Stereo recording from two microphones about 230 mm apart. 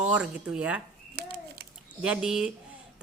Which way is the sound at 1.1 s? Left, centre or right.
Right.